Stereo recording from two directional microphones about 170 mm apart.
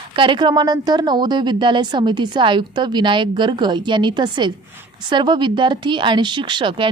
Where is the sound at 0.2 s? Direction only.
30° right (ahead or behind).